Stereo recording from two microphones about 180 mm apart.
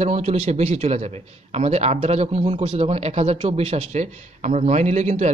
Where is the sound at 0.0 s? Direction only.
35° right (ahead or behind).